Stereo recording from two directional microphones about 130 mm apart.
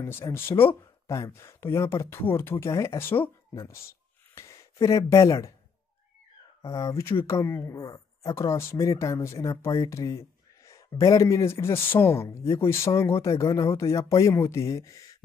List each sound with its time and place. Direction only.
0.3 s speech: 15° left (ahead or behind)
6.6 s speech: 25° left (ahead or behind)